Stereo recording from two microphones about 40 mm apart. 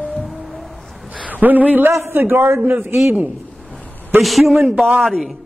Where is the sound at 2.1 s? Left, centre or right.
Right.